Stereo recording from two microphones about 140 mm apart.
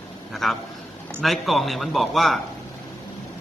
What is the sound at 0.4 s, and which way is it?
A man's voice, centre (ahead or behind).